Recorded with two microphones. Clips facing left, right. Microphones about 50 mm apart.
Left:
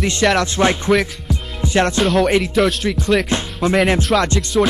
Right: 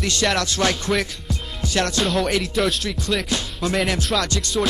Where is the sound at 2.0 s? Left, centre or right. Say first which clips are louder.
Left 6 dB; centre.